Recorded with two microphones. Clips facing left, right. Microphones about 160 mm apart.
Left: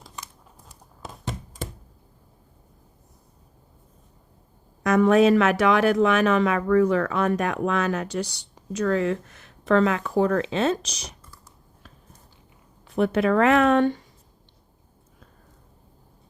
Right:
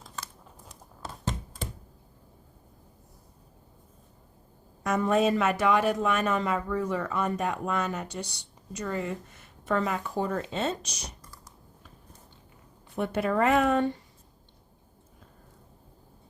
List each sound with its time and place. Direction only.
4.8 s speech: 90° left
13.0 s speech: 90° left